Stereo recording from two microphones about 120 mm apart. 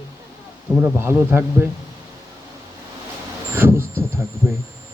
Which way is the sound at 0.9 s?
20° right (ahead or behind).